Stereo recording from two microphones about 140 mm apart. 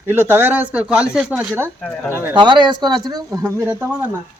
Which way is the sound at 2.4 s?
35° right (ahead or behind).